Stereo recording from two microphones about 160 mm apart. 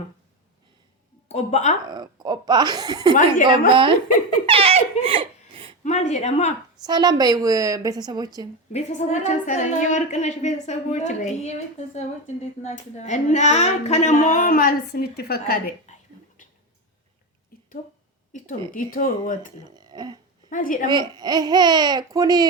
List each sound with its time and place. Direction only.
1.3 s a woman's voice: 45° left (ahead or behind)
1.8 s speech: 25° right (ahead or behind)
4.4 s laughter: 35° right (ahead or behind)
5.8 s a woman's voice: 45° left (ahead or behind)
6.8 s speech: 25° right (ahead or behind)
8.7 s a woman's voice: 45° left (ahead or behind); by 15.7 s 70° left (ahead or behind)
18.7 s speech: 60° left (ahead or behind)
19.7 s a sound: 25° right (ahead or behind)
20.5 s speech: 55° left (ahead or behind)
20.8 s speech: 25° right (ahead or behind)